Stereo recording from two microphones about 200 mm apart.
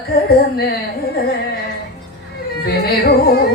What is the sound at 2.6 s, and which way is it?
Speech, 50° left (ahead or behind).